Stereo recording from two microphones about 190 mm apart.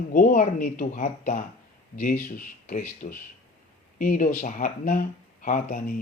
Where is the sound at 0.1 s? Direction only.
45° left (ahead or behind).